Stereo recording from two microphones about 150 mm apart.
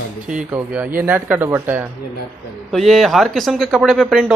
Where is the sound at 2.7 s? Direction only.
Centre (ahead or behind).